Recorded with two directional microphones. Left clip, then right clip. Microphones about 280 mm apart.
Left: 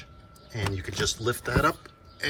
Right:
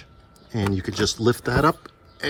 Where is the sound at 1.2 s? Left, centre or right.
Centre.